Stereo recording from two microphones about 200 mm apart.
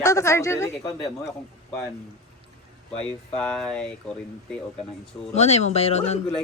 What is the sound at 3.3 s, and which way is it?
Speech, 5° left (ahead or behind).